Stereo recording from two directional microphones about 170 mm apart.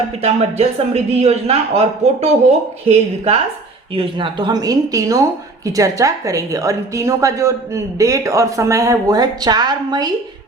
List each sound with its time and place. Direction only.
0.2 s a man's voice: 40° right (ahead or behind)
3.9 s a woman's voice: 30° right (ahead or behind)